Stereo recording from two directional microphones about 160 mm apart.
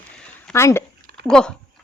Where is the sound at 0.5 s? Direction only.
15° left (ahead or behind).